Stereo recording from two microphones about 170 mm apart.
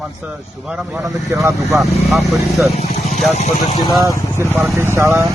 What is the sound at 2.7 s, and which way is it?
Speech, 40° left (ahead or behind).